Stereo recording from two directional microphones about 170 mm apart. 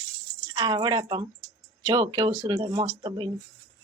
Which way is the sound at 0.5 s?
25° right (ahead or behind).